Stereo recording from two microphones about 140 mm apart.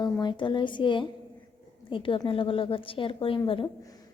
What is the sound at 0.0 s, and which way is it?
Speech, 35° left (ahead or behind).